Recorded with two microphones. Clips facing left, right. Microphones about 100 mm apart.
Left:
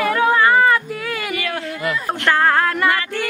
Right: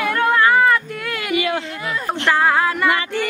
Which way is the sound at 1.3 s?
20° right (ahead or behind).